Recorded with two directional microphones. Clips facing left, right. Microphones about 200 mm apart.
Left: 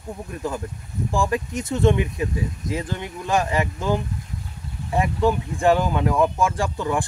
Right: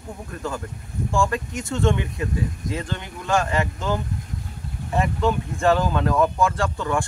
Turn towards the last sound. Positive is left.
turn(degrees=15)  # may be behind; listen again after turning